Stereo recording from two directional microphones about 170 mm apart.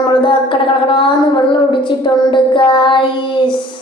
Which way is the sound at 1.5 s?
30° left (ahead or behind).